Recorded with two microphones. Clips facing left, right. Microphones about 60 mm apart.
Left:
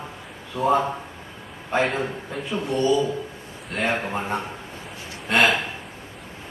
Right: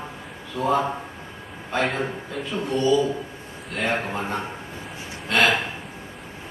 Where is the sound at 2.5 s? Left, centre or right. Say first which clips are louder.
Even; centre.